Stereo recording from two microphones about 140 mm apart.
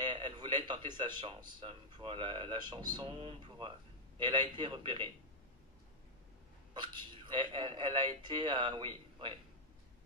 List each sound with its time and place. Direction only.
0.0 s a man's voice: 35° right (ahead or behind)
6.7 s a man's voice: 30° right (ahead or behind)